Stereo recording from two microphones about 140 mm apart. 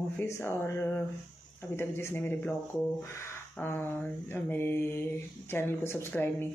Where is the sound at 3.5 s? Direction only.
15° left (ahead or behind).